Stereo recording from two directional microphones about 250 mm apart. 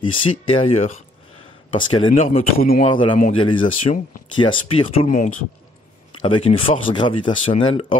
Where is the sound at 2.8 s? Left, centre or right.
Left.